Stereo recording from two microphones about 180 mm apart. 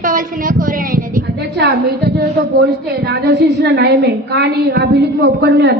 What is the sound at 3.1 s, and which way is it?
A woman's voice, 70° right (ahead or behind).